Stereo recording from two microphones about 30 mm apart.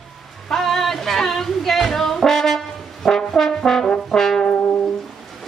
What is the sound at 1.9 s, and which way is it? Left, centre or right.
Brass instrument, centre.